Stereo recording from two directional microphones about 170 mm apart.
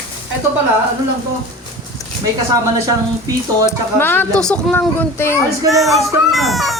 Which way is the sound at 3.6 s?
10° left (ahead or behind).